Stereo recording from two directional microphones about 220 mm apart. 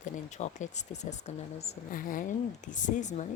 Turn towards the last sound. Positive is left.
turn(degrees=35)  # may be behind; listen again after turning